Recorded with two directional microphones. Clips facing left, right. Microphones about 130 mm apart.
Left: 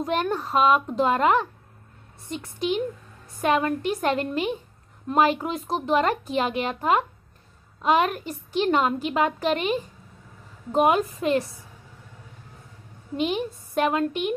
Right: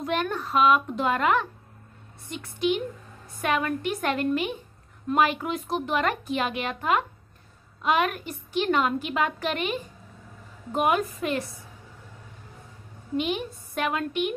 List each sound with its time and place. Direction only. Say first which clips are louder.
0.0 s a woman's voice: left 3 dB; 35° left (ahead or behind)
13.2 s a woman's voice: left 5 dB; 35° left (ahead or behind)